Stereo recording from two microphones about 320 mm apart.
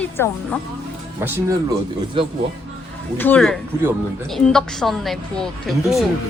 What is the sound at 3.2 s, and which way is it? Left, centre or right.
Speech, centre.